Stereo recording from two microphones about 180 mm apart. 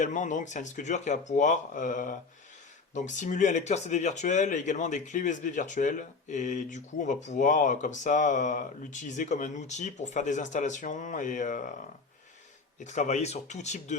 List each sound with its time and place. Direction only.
0.0 s speech: 45° left (ahead or behind)
12.8 s speech: 40° left (ahead or behind)